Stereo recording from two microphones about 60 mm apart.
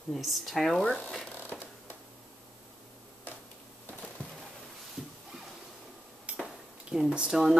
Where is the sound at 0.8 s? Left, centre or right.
Left.